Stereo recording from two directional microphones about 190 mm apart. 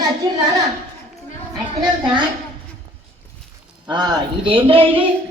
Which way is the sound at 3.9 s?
20° right (ahead or behind).